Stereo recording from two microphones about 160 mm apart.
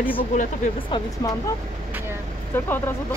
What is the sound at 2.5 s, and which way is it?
Speech, 15° left (ahead or behind).